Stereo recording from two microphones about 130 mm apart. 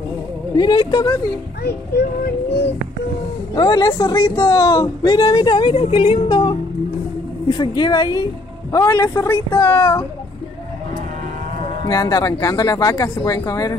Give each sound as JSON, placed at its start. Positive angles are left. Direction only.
{"t": 0.6, "sound": "speech", "side_deg": 35}
{"t": 3.5, "sound": "speech", "side_deg": 30}
{"t": 11.9, "sound": "speech", "side_deg": 25}